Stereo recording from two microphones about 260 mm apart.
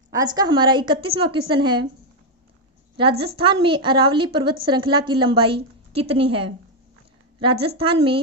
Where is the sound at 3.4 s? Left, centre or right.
Centre.